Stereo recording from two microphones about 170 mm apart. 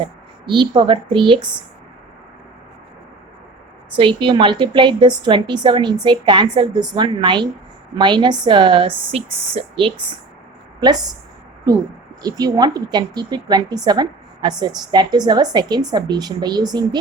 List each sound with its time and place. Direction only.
0.0 s speech: 30° right (ahead or behind)
3.9 s a woman's voice: 30° right (ahead or behind)
8.9 s speech: 10° right (ahead or behind)
9.6 s speech: 30° right (ahead or behind)
12.2 s a woman's voice: 20° right (ahead or behind)